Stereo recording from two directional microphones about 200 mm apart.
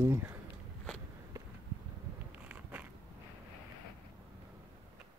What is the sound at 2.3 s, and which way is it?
Biting, 10° right (ahead or behind).